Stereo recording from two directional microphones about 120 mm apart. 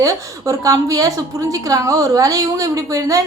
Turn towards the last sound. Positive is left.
turn(degrees=-30)  # may be behind; listen again after turning